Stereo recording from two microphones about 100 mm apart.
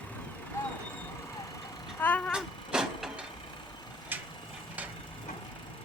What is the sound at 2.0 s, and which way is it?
Cat, 15° left (ahead or behind).